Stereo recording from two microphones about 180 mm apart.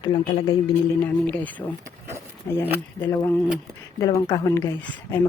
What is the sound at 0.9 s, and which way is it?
Speech, 10° left (ahead or behind).